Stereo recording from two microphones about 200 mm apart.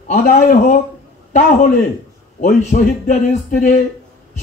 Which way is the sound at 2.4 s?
40° left (ahead or behind).